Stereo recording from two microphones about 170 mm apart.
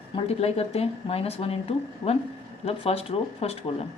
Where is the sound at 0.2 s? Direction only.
35° left (ahead or behind).